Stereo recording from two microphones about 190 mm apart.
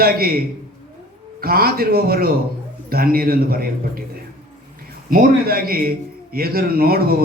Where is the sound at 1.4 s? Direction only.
50° right (ahead or behind).